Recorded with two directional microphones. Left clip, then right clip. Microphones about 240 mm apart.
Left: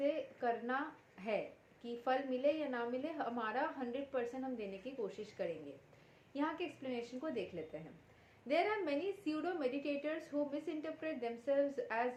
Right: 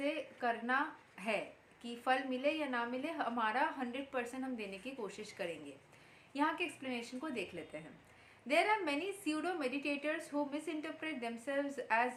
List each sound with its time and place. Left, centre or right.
0.0 s a sound: right
1.8 s a woman's voice: right
8.4 s a woman's voice: centre